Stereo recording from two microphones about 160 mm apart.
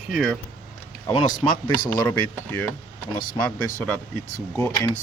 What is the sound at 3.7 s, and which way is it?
Speech, 10° left (ahead or behind).